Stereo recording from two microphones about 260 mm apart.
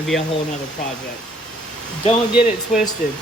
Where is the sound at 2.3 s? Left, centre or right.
Centre.